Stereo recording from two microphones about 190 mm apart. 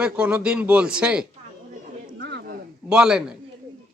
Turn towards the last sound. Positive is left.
turn(degrees=-5)  # may be behind; listen again after turning